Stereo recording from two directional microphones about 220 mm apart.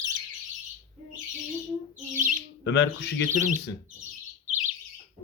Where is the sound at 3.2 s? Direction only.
35° right (ahead or behind).